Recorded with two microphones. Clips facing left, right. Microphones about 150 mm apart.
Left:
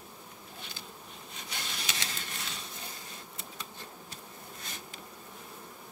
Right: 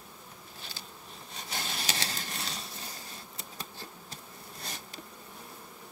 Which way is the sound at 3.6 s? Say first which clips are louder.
Right 3 dB; 35° right (ahead or behind).